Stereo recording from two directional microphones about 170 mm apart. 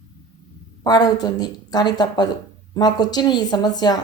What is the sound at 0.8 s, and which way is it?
A woman's voice, 25° left (ahead or behind).